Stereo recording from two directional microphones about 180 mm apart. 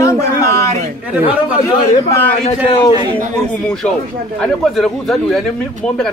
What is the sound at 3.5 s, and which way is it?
Speech, 5° left (ahead or behind).